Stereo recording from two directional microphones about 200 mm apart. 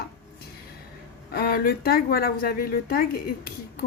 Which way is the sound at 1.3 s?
50° left (ahead or behind).